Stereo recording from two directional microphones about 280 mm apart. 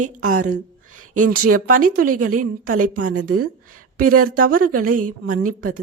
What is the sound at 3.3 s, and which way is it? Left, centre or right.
Speech, right.